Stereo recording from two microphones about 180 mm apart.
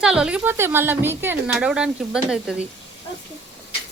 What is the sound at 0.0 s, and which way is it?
A woman's voice, 5° right (ahead or behind).